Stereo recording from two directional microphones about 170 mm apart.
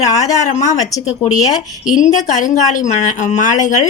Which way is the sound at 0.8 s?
20° left (ahead or behind).